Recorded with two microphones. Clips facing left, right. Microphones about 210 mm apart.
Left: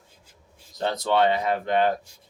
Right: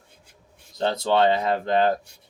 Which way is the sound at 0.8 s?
30° right (ahead or behind).